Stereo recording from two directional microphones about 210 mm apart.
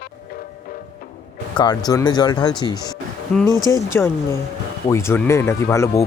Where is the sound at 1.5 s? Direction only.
20° left (ahead or behind).